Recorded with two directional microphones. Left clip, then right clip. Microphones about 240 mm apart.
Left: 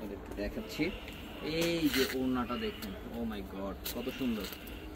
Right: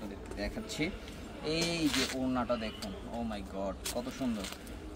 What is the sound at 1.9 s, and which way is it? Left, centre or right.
Speech, centre.